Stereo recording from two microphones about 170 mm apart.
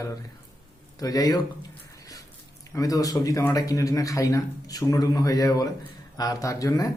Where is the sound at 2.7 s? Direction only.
20° left (ahead or behind).